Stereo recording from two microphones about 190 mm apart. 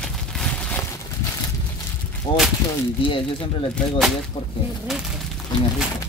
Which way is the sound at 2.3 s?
25° left (ahead or behind).